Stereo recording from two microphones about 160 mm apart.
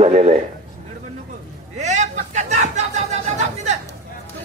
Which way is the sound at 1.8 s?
45° right (ahead or behind).